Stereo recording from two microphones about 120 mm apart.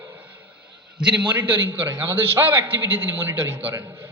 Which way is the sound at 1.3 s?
15° right (ahead or behind).